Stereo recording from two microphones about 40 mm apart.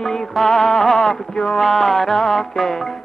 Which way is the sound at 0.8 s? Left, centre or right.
Centre.